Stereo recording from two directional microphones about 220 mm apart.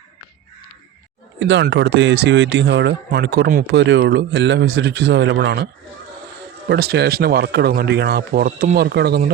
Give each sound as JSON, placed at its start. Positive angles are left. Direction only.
{"t": 1.4, "sound": "speech", "side_deg": -55}
{"t": 6.7, "sound": "speech", "side_deg": -45}